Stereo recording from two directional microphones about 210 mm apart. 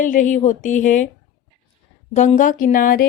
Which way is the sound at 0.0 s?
40° left (ahead or behind).